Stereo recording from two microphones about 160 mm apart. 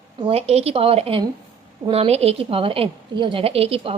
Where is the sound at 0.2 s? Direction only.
35° right (ahead or behind).